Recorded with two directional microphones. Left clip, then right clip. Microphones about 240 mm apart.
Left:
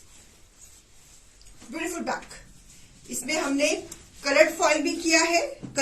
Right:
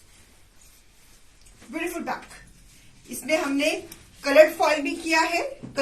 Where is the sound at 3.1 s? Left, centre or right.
Centre.